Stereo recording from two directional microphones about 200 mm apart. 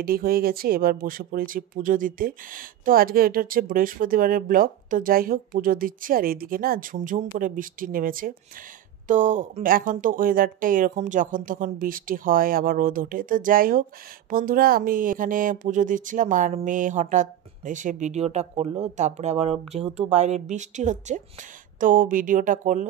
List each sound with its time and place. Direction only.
0.0 s speech: 50° right (ahead or behind)